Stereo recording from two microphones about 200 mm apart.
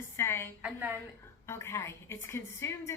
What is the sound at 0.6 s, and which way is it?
Speech, 10° right (ahead or behind).